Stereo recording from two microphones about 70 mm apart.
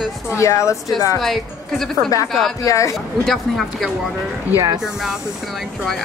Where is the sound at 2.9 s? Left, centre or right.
Centre.